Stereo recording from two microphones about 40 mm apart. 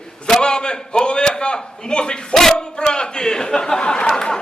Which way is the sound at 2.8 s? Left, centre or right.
Left.